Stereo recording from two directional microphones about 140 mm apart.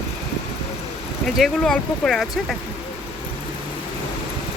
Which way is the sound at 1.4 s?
5° left (ahead or behind).